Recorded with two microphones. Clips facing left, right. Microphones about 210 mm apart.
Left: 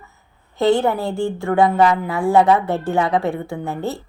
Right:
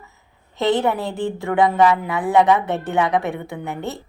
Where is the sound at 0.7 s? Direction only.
20° right (ahead or behind).